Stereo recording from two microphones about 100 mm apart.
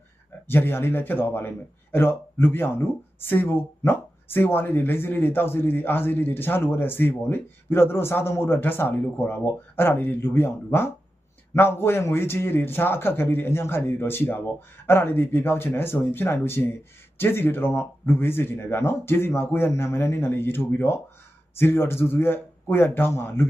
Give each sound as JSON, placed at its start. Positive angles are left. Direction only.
{"t": 0.4, "sound": "a man's voice", "side_deg": 20}